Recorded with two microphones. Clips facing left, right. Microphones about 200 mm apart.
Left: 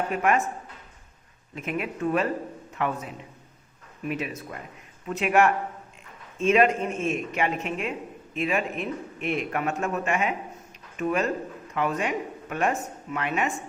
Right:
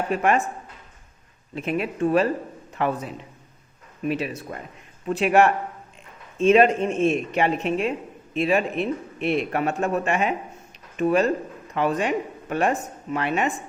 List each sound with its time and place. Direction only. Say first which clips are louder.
0.2 s speech: right 1 dB; 30° right (ahead or behind)
1.5 s speech: right 5 dB; 30° right (ahead or behind)